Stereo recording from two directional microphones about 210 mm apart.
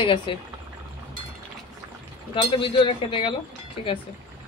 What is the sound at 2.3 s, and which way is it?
Speech, 25° left (ahead or behind).